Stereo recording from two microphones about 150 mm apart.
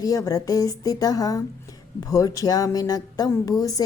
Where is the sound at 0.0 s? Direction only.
20° left (ahead or behind).